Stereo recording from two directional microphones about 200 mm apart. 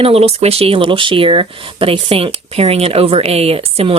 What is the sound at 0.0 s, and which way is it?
Speech, 30° right (ahead or behind).